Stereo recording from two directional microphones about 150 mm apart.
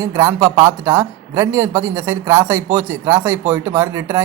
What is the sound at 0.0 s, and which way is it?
Speech, 20° right (ahead or behind).